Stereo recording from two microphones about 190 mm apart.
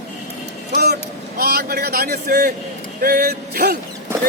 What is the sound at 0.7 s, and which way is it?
Speech, 55° right (ahead or behind).